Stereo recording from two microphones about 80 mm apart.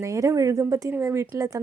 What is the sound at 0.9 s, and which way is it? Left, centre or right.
Speech, right.